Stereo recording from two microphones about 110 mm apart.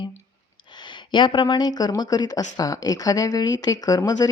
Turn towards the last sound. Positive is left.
turn(degrees=35)  # may be behind; listen again after turning